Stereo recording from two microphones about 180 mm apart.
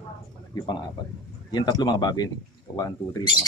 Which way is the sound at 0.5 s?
25° left (ahead or behind).